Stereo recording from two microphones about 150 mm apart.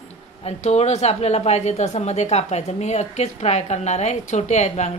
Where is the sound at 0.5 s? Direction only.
50° left (ahead or behind).